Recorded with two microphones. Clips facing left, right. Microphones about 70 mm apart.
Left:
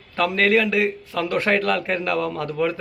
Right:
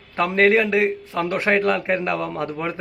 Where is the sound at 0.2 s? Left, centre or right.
Right.